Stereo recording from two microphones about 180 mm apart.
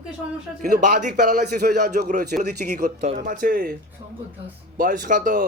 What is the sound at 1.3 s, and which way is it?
Speech, 60° right (ahead or behind).